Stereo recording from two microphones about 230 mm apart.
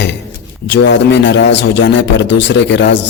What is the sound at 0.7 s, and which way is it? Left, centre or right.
A man's voice, left.